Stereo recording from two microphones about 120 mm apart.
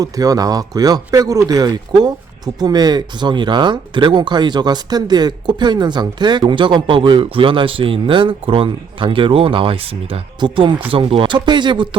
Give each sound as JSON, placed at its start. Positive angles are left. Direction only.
{"t": 0.0, "sound": "speech", "side_deg": -30}